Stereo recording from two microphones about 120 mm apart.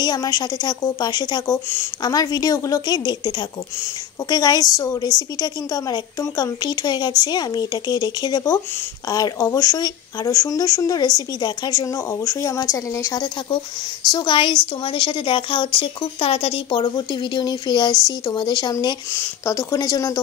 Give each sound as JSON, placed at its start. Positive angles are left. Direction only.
{"t": 0.0, "sound": "a woman's voice", "side_deg": 35}
{"t": 14.1, "sound": "a woman's voice", "side_deg": 40}